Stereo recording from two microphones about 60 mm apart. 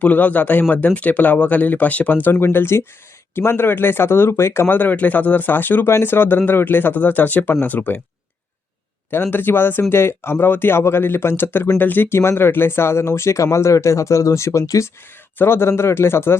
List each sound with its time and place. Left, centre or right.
0.0 s speech: left
9.0 s speech: left
13.1 s speech: left
15.4 s speech: left